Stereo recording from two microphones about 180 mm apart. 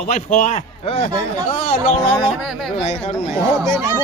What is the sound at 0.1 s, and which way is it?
Snicker, 40° left (ahead or behind).